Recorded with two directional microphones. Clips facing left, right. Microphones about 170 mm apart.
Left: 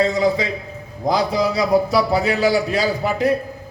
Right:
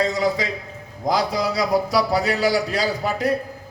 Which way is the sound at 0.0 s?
25° left (ahead or behind).